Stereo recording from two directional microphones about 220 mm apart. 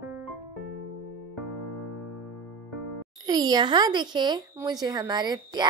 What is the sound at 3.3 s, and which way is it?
Speech, 20° right (ahead or behind).